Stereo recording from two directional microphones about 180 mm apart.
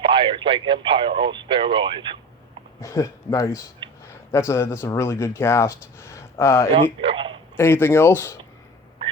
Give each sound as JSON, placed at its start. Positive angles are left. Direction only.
{"t": 0.0, "sound": "speech", "side_deg": -30}
{"t": 2.8, "sound": "speech", "side_deg": 20}
{"t": 6.7, "sound": "a sound", "side_deg": -30}
{"t": 7.5, "sound": "speech", "side_deg": 15}